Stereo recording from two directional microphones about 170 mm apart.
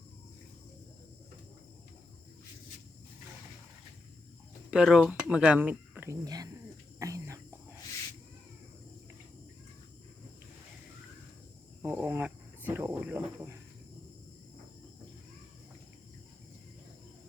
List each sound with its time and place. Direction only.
4.7 s speech: 5° right (ahead or behind); by 6.6 s 20° right (ahead or behind)
7.0 s whispering: 20° right (ahead or behind)
11.8 s speech: 10° right (ahead or behind)